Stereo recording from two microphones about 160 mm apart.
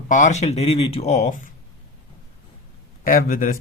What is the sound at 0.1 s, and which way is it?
Speech, 50° left (ahead or behind).